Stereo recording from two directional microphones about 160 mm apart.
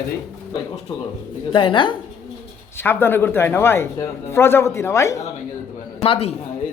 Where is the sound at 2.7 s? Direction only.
15° left (ahead or behind).